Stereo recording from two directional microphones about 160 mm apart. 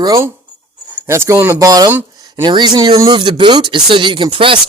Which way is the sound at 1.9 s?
15° right (ahead or behind).